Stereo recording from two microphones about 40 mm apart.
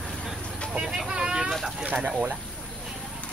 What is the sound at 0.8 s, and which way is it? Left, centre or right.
Speech, centre.